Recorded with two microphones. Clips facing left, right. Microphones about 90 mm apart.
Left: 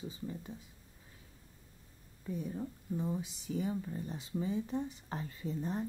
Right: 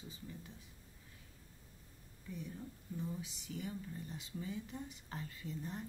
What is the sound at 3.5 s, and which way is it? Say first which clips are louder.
Speech: left 9 dB; 30° left (ahead or behind).